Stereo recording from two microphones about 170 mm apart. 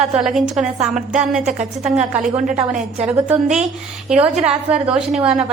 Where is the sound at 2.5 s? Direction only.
50° right (ahead or behind).